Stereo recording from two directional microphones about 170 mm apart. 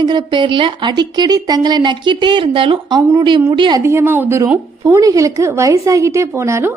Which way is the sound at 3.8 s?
15° right (ahead or behind).